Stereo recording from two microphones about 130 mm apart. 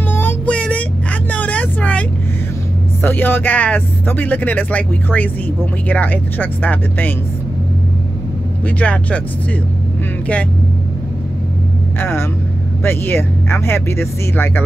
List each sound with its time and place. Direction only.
0.1 s child singing: 15° left (ahead or behind)
1.3 s vehicle: 10° left (ahead or behind)
3.0 s speech: 15° left (ahead or behind)
8.6 s speech: 10° left (ahead or behind)
12.0 s speech: 15° left (ahead or behind)